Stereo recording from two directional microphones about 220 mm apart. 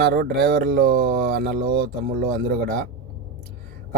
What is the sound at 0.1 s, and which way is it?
Speech, 45° right (ahead or behind).